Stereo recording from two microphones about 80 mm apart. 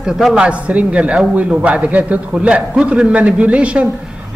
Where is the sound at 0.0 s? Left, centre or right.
Centre.